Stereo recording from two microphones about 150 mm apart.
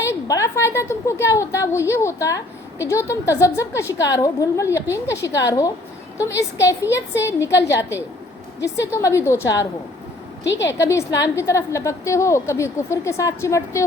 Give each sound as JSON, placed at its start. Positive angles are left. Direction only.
{"t": 0.0, "sound": "a woman's voice", "side_deg": 20}